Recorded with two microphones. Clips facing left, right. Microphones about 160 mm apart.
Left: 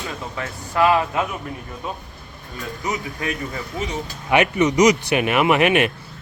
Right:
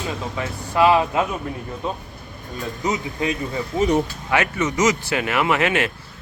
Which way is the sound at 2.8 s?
20° right (ahead or behind).